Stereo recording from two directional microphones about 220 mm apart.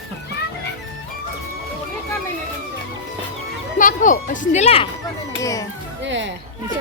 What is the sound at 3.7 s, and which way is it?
Speech, 35° left (ahead or behind).